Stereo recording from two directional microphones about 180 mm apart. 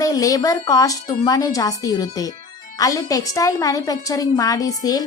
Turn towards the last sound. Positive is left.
turn(degrees=20)  # may be behind; listen again after turning